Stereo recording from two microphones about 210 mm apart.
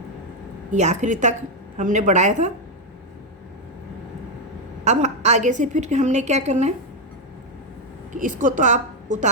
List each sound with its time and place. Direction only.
0.7 s a woman's voice: 35° right (ahead or behind)
4.9 s a woman's voice: 35° right (ahead or behind)
8.1 s a woman's voice: 40° right (ahead or behind)